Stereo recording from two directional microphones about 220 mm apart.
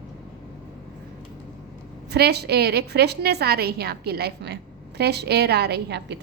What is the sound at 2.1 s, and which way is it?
A woman's voice, 45° right (ahead or behind).